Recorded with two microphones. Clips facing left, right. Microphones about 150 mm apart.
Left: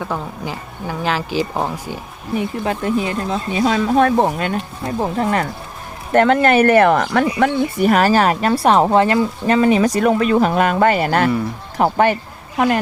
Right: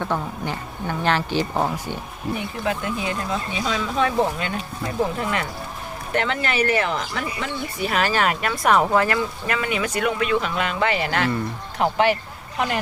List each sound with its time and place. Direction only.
0.0 s speech: 5° left (ahead or behind)
2.6 s speech: 30° left (ahead or behind)
3.5 s a woman's voice: 50° left (ahead or behind)